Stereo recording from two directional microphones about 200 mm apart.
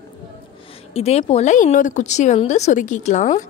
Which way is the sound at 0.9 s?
30° left (ahead or behind).